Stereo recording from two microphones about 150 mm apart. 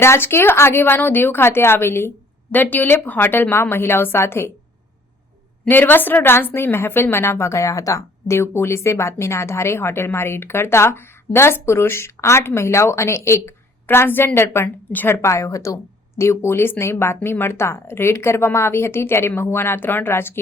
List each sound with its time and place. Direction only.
0.0 s a woman's voice: 15° left (ahead or behind)
5.6 s a woman's voice: 10° left (ahead or behind)